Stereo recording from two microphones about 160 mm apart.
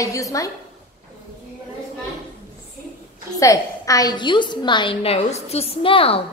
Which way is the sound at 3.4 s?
20° left (ahead or behind).